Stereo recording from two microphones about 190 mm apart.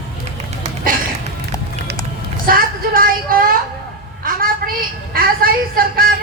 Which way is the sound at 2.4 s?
50° right (ahead or behind).